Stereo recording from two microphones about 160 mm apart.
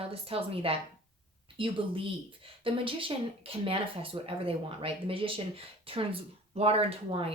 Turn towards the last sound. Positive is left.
turn(degrees=-35)  # may be behind; listen again after turning